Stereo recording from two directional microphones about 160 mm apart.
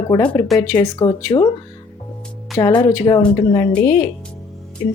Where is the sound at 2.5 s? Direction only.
25° left (ahead or behind).